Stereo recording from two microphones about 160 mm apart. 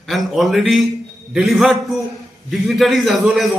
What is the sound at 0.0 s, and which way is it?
A man's voice, centre (ahead or behind).